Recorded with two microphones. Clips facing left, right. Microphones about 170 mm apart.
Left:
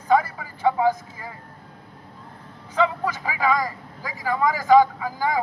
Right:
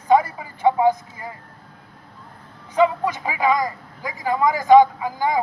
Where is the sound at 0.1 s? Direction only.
20° right (ahead or behind).